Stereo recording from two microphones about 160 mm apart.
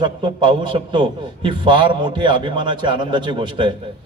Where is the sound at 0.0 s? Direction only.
30° right (ahead or behind).